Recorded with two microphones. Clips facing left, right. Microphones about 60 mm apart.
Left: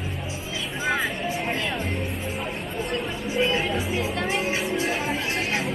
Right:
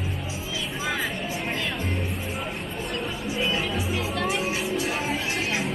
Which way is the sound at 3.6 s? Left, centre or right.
Left.